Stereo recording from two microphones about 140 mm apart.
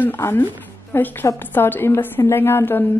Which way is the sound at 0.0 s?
15° left (ahead or behind).